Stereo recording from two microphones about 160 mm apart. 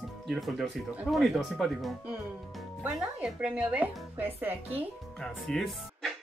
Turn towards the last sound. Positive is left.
turn(degrees=0)  # may be behind; listen again after turning